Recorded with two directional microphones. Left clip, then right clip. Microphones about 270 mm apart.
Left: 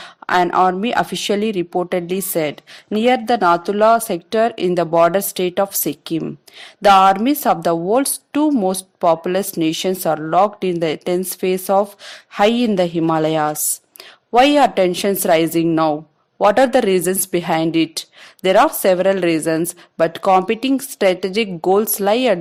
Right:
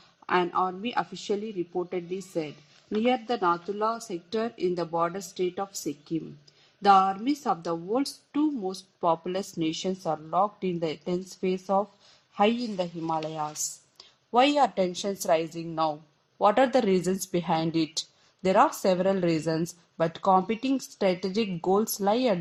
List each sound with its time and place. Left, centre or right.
0.3 s a woman's voice: left
6.8 s a woman's voice: left